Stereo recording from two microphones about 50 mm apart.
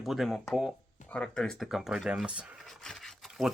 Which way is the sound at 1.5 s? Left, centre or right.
Centre.